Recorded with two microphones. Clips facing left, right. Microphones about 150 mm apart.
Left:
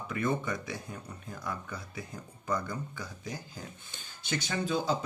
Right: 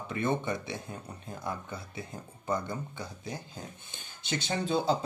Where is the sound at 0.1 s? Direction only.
25° right (ahead or behind).